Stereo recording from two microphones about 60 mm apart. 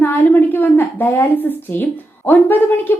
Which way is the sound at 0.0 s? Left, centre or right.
Left.